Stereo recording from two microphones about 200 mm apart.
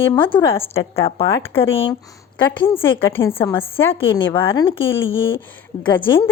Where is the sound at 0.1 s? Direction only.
25° left (ahead or behind).